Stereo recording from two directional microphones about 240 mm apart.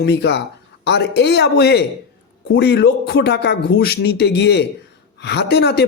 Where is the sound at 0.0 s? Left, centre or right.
Left.